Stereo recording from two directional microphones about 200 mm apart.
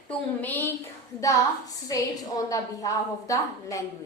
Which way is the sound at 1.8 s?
20° left (ahead or behind).